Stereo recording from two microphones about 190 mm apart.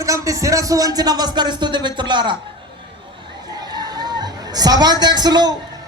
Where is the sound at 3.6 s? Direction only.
20° right (ahead or behind).